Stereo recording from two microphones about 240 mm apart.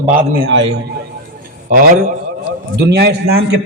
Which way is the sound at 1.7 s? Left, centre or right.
Right.